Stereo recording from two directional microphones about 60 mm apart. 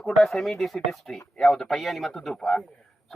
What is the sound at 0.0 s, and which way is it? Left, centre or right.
Speech, centre.